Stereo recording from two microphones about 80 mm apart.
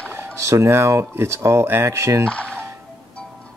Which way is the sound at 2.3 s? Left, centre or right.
Centre.